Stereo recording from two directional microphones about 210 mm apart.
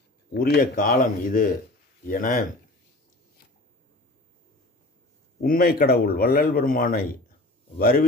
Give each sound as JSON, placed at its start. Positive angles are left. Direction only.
{"t": 0.3, "sound": "a man's voice", "side_deg": 45}
{"t": 5.4, "sound": "a man's voice", "side_deg": 45}